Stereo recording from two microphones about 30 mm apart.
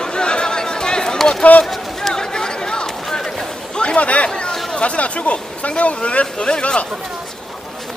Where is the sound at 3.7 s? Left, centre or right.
Left.